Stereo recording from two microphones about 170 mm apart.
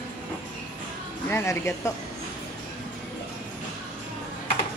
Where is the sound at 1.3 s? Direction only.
15° left (ahead or behind).